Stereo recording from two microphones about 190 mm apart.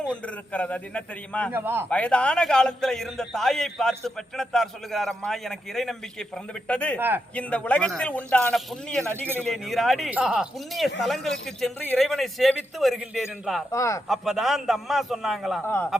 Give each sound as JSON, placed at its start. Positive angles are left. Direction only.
{"t": 0.0, "sound": "a man's voice", "side_deg": 5}
{"t": 1.5, "sound": "a man's voice", "side_deg": -10}
{"t": 1.9, "sound": "a man's voice", "side_deg": 5}
{"t": 13.7, "sound": "a man's voice", "side_deg": 15}
{"t": 14.1, "sound": "a man's voice", "side_deg": 0}
{"t": 15.6, "sound": "a man's voice", "side_deg": 10}